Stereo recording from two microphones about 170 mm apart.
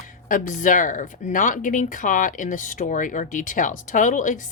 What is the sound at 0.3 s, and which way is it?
Speech, 50° left (ahead or behind).